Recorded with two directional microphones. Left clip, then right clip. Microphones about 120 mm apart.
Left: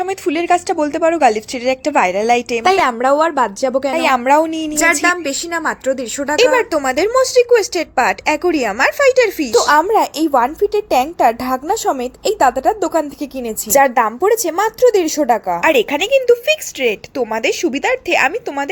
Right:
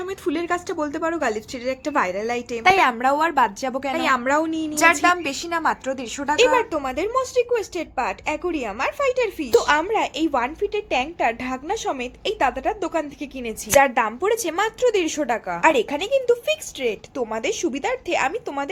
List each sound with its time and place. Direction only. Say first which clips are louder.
0.0 s a woman's voice: left 8 dB; 45° left (ahead or behind)
2.6 s a woman's voice: left 3 dB; 30° left (ahead or behind)
3.9 s a woman's voice: left 7 dB; 45° left (ahead or behind)
5.0 s a woman's voice: left 4 dB; 20° left (ahead or behind)